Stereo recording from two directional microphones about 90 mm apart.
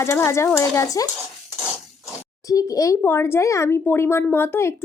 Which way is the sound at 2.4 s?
40° left (ahead or behind).